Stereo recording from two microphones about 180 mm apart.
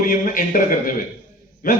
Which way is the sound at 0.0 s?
50° left (ahead or behind).